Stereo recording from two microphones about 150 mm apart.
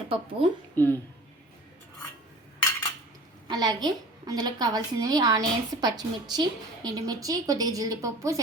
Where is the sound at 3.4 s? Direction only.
25° right (ahead or behind).